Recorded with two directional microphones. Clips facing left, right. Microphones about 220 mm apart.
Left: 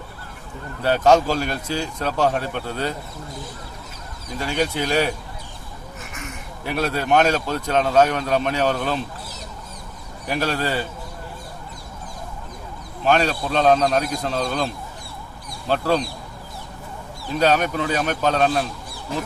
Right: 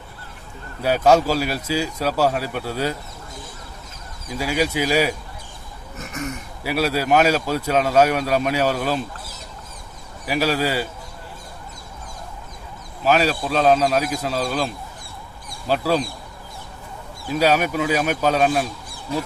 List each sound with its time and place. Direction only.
0.8 s speech: 10° right (ahead or behind)
4.3 s speech: 5° right (ahead or behind)
6.0 s a sound: 40° right (ahead or behind)
6.7 s speech: 5° right (ahead or behind)
10.2 s speech: 5° right (ahead or behind)
13.1 s speech: 5° right (ahead or behind)
17.3 s speech: 10° right (ahead or behind)